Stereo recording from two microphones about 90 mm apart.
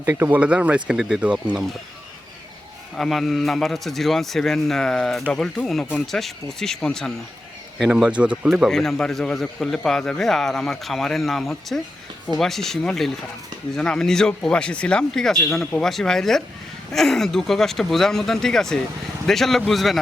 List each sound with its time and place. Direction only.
0.0 s speech: 25° right (ahead or behind)
0.3 s speech: 15° right (ahead or behind)
3.0 s a man's voice: centre (ahead or behind)
7.8 s speech: 10° right (ahead or behind)
8.7 s a man's voice: 5° left (ahead or behind)